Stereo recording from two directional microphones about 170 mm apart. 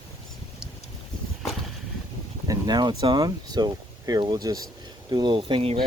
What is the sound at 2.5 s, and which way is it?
Speech, 25° right (ahead or behind).